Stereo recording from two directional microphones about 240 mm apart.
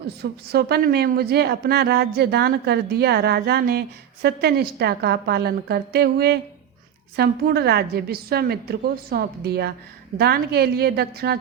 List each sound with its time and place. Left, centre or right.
0.2 s a woman's voice: right